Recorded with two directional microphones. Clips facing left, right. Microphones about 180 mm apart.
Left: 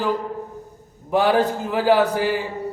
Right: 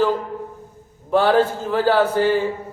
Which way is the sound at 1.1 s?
15° left (ahead or behind).